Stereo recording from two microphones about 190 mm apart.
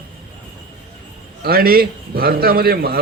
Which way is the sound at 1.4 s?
55° right (ahead or behind).